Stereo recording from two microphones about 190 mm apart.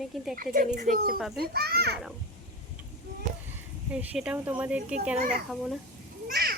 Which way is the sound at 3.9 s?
5° right (ahead or behind).